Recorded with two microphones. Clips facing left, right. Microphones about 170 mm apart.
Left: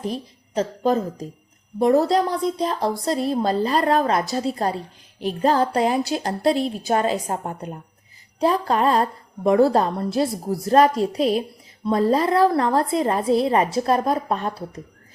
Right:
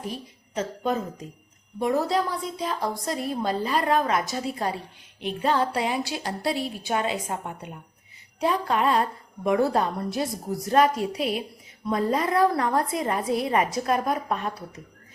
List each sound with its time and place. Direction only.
0.0 s a woman's voice: 35° left (ahead or behind)